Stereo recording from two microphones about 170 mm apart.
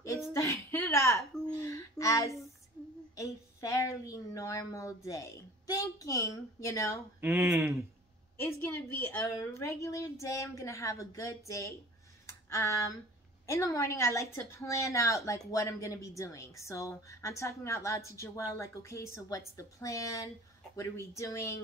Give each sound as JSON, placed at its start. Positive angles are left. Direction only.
{"t": 0.3, "sound": "a sound", "side_deg": 15}
{"t": 3.2, "sound": "a woman's voice", "side_deg": 20}
{"t": 7.2, "sound": "speech", "side_deg": -10}
{"t": 8.6, "sound": "a woman's voice", "side_deg": 10}